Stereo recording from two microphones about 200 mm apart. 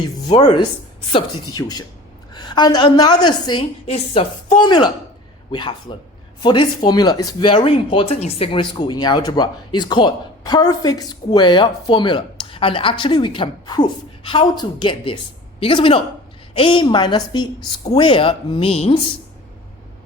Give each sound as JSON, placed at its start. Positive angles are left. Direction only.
{"t": 1.1, "sound": "a woman's voice", "side_deg": 20}